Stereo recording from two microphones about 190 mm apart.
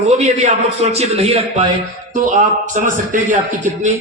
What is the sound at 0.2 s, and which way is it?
A man's voice, 35° right (ahead or behind).